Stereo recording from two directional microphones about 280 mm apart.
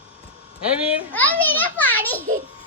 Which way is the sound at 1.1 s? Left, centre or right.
Centre.